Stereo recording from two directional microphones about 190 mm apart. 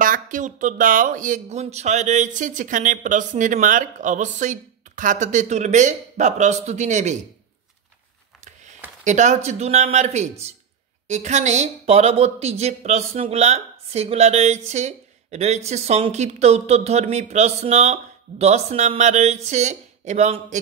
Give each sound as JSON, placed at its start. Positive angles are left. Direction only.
{"t": 0.0, "sound": "speech", "side_deg": -45}
{"t": 9.0, "sound": "speech", "side_deg": -40}